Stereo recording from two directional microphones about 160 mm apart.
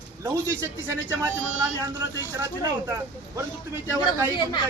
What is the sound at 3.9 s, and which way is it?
Speech, 15° right (ahead or behind).